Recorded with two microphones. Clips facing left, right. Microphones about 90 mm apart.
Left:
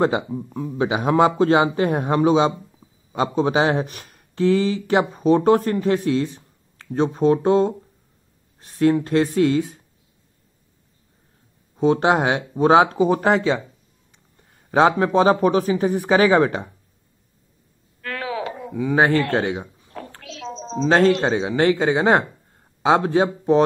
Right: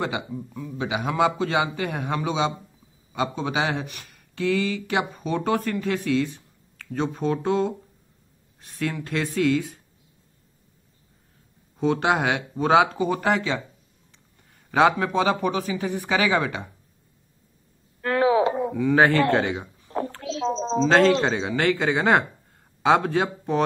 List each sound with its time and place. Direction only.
0.0 s a man's voice: 35° left (ahead or behind)
11.8 s a man's voice: 30° left (ahead or behind)
18.0 s a sound: 25° right (ahead or behind)
18.7 s speech: 15° left (ahead or behind)
20.2 s a sound: 25° right (ahead or behind)
20.8 s speech: 15° left (ahead or behind)